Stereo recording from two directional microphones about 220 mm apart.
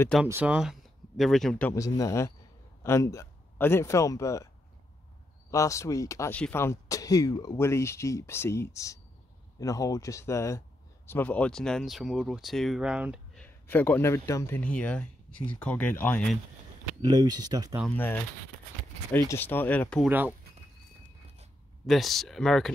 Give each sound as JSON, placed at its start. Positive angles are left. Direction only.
{"t": 0.2, "sound": "speech", "side_deg": -5}
{"t": 5.5, "sound": "speech", "side_deg": 15}
{"t": 17.0, "sound": "speech", "side_deg": -20}
{"t": 17.9, "sound": "speech", "side_deg": 10}
{"t": 20.1, "sound": "speech", "side_deg": -10}
{"t": 21.8, "sound": "speech", "side_deg": 0}